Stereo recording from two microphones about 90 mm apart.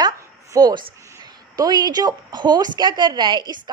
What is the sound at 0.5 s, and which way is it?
A woman's voice, 45° right (ahead or behind).